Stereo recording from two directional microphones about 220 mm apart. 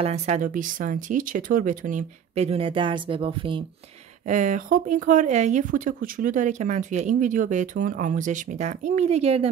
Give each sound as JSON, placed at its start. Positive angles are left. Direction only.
{"t": 0.0, "sound": "speech", "side_deg": -30}
{"t": 4.3, "sound": "speech", "side_deg": -35}